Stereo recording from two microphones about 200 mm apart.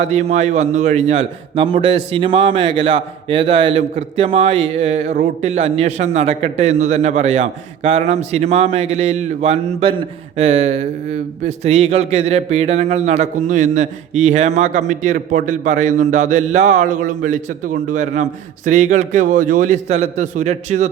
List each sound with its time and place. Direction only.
0.1 s a man's voice: 35° right (ahead or behind)